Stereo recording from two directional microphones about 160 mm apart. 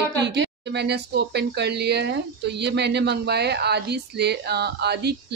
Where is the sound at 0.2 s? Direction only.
90° right.